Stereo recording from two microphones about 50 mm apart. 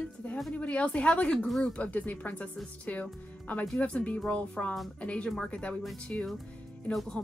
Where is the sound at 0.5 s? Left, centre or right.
Left.